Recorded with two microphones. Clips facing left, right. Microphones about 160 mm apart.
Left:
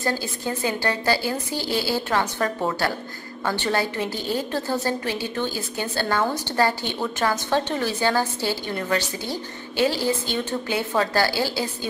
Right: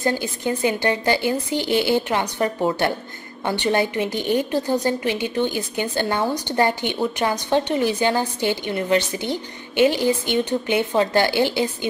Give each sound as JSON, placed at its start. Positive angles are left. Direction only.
{"t": 0.0, "sound": "a woman's voice", "side_deg": -20}